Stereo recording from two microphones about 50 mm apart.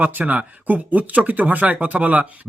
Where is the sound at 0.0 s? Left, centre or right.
Right.